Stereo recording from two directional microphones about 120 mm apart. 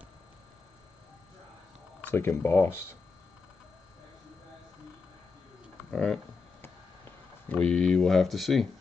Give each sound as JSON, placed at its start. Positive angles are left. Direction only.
{"t": 2.0, "sound": "speech", "side_deg": 20}
{"t": 5.9, "sound": "speech", "side_deg": 5}
{"t": 7.4, "sound": "speech", "side_deg": 10}